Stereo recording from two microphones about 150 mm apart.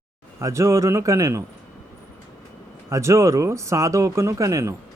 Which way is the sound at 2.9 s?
20° right (ahead or behind).